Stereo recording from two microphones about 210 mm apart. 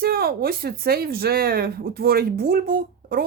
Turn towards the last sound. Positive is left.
turn(degrees=-45)  # may be behind; listen again after turning